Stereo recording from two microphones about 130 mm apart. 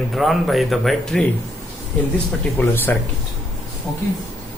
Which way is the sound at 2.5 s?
15° left (ahead or behind).